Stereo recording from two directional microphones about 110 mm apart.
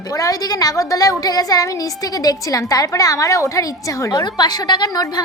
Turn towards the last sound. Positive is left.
turn(degrees=35)  # may be behind; listen again after turning